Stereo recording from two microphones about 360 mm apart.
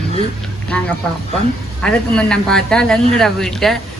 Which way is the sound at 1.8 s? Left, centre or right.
Centre.